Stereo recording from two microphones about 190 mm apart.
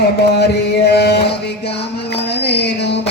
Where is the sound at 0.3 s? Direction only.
60° left (ahead or behind).